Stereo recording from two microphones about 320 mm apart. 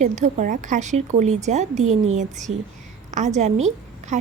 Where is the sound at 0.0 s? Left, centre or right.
Right.